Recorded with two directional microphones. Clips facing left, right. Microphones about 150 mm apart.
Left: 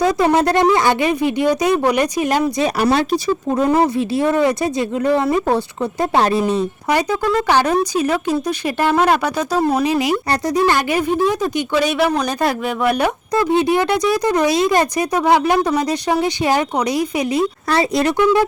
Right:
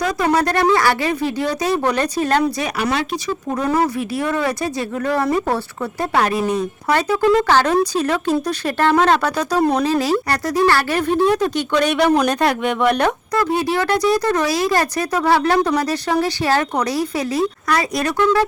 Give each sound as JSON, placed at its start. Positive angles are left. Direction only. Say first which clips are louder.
{"t": 0.2, "sound": "speech", "louder": "left 3 dB", "side_deg": 20}
{"t": 2.7, "sound": "speech", "louder": "left 5 dB", "side_deg": 40}
{"t": 3.5, "sound": "speech", "louder": "left 3 dB", "side_deg": 20}
{"t": 6.8, "sound": "speech", "louder": "right 1 dB", "side_deg": 15}
{"t": 7.2, "sound": "speech", "louder": "right 4 dB", "side_deg": 0}
{"t": 7.4, "sound": "speech", "louder": "even", "side_deg": 10}
{"t": 9.8, "sound": "speech", "louder": "even", "side_deg": 15}
{"t": 13.3, "sound": "speech", "louder": "left 7 dB", "side_deg": 20}
{"t": 18.2, "sound": "speech", "louder": "left 1 dB", "side_deg": 10}